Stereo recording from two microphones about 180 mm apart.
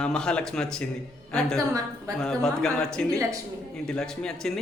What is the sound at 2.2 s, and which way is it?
A man's voice, 5° left (ahead or behind).